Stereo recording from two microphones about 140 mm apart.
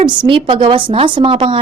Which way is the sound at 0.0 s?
35° right (ahead or behind).